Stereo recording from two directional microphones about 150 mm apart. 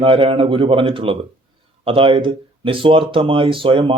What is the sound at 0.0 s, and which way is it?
Speech, 35° right (ahead or behind).